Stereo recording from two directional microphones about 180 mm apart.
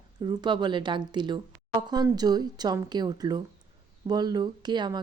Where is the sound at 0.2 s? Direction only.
25° right (ahead or behind).